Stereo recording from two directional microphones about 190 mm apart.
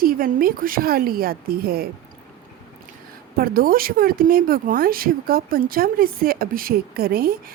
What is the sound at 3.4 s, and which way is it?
A woman's voice, 50° right (ahead or behind).